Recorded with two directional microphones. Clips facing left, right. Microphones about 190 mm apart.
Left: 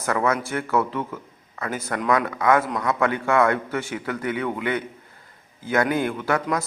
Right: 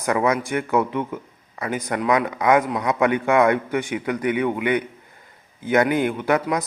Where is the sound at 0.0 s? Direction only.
15° right (ahead or behind).